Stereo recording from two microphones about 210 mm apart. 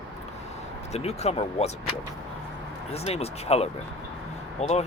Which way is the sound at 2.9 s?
30° left (ahead or behind).